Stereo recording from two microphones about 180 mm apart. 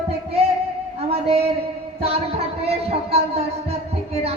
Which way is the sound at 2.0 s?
35° right (ahead or behind).